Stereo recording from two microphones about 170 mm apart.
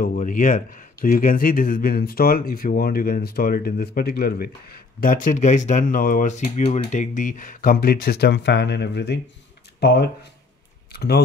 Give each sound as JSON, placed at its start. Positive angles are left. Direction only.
{"t": 0.0, "sound": "speech", "side_deg": 55}